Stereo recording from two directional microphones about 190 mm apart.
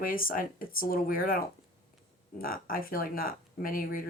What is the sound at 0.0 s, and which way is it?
Speech, 45° left (ahead or behind).